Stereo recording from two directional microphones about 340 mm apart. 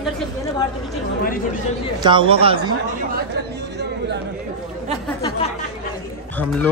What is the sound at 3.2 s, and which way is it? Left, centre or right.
Chatter, right.